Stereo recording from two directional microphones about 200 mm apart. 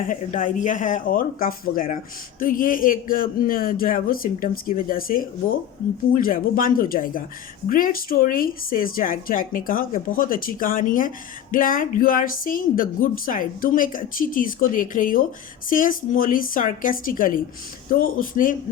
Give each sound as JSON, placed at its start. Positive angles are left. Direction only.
{"t": 0.1, "sound": "a woman's voice", "side_deg": 40}